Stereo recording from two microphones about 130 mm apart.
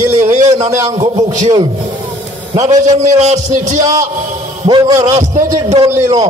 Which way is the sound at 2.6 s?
65° right (ahead or behind).